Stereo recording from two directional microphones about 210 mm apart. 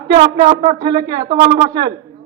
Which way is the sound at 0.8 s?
20° right (ahead or behind).